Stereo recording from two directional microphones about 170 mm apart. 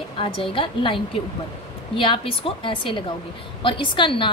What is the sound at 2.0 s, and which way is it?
A woman's voice, 30° left (ahead or behind).